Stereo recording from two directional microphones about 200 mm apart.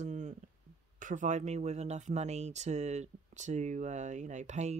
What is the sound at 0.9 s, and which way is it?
Speech, 40° right (ahead or behind).